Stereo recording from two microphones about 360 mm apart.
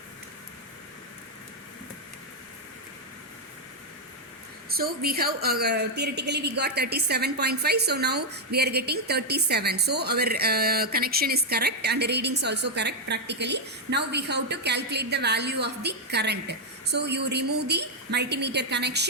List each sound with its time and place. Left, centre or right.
4.7 s a woman's voice: right